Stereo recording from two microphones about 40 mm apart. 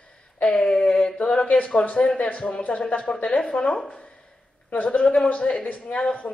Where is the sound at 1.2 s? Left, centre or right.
Left.